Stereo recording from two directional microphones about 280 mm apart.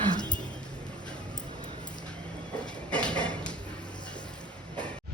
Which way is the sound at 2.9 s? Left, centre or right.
Centre.